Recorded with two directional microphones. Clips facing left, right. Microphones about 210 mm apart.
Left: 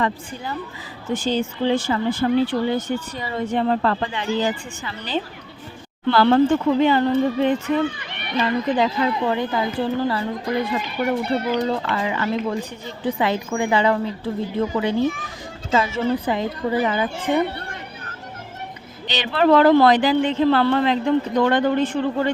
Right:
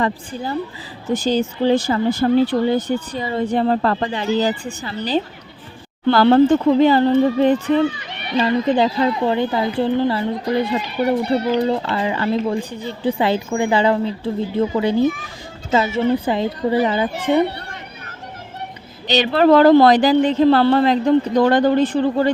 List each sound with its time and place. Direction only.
0.0 s a woman's voice: 35° right (ahead or behind)
19.0 s speech: 40° right (ahead or behind)